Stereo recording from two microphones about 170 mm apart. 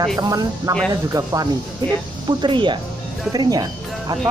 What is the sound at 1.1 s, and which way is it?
Speech, 20° right (ahead or behind).